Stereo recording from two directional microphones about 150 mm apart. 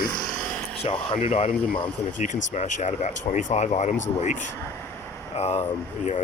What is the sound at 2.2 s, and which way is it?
Speech, 55° left (ahead or behind).